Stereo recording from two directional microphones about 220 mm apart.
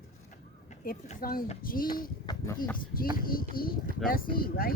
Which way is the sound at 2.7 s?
40° left (ahead or behind).